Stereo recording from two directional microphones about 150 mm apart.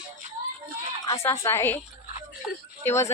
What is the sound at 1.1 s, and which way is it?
Music, 15° left (ahead or behind).